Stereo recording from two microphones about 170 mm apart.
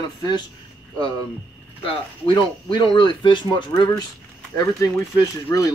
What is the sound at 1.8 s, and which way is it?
Speech, 30° left (ahead or behind).